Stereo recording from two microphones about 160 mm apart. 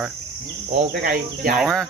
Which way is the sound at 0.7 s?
70° right (ahead or behind).